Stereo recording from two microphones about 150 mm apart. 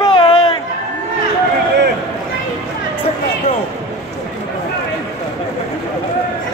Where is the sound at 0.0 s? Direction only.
35° left (ahead or behind).